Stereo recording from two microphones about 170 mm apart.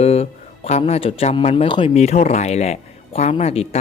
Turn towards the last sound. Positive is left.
turn(degrees=35)  # may be behind; listen again after turning